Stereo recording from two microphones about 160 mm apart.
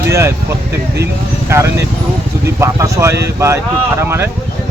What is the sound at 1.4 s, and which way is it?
Speech, 15° right (ahead or behind).